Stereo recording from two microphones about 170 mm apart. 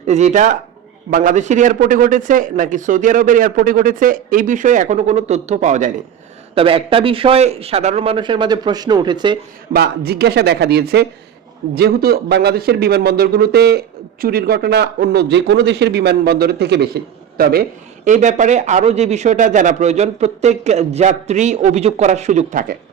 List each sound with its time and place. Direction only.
0.0 s a man's voice: 45° right (ahead or behind)
6.5 s a man's voice: 35° right (ahead or behind)
9.7 s a man's voice: 70° right (ahead or behind)
18.0 s a man's voice: 45° right (ahead or behind)